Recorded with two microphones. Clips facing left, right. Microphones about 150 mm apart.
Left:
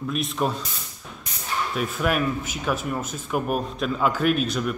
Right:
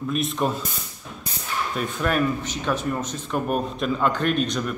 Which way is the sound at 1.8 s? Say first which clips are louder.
Right 1 dB; 5° left (ahead or behind).